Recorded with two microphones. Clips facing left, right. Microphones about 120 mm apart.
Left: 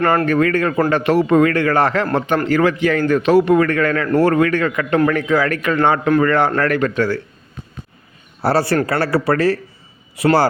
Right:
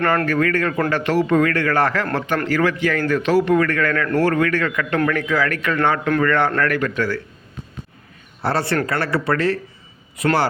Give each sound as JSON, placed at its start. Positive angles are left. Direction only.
{"t": 0.3, "sound": "a man's voice", "side_deg": 20}
{"t": 8.4, "sound": "a man's voice", "side_deg": 35}